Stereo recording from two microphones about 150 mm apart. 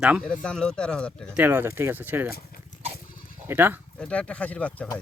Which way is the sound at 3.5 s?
15° right (ahead or behind).